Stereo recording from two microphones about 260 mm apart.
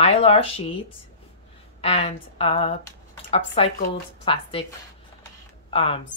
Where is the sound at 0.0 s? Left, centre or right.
Left.